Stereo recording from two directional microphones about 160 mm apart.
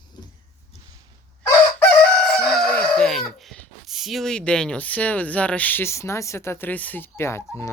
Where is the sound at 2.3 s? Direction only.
Centre (ahead or behind).